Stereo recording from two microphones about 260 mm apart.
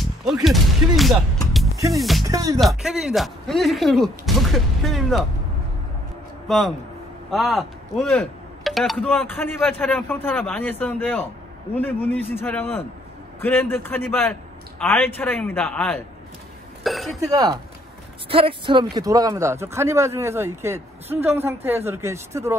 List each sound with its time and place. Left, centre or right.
0.0 s speech: centre
2.2 s speech: centre
2.6 s speech: centre
6.4 s a man's voice: centre
16.8 s a sound: centre
17.3 s speech: centre